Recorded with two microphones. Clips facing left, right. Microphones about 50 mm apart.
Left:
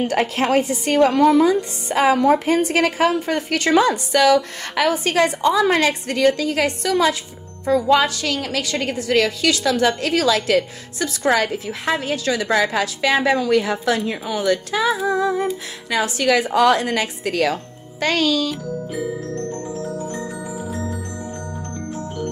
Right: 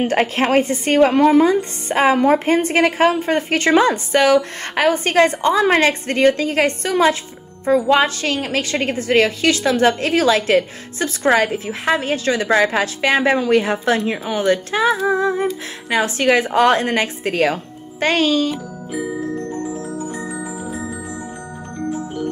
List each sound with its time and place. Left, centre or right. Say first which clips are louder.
0.0 s a woman's voice: right 2 dB; right
18.9 s music: right 6 dB; centre